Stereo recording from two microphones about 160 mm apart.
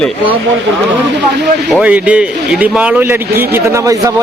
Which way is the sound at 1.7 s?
10° right (ahead or behind).